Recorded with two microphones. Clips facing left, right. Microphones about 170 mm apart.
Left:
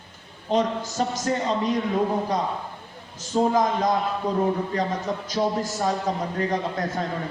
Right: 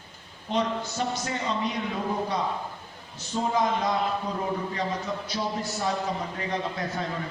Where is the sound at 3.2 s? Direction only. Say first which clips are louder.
Left 6 dB; 40° left (ahead or behind).